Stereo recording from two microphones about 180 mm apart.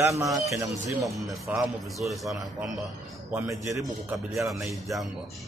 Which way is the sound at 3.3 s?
15° right (ahead or behind).